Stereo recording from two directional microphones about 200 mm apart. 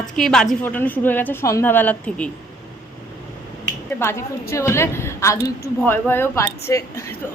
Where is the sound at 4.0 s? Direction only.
15° left (ahead or behind).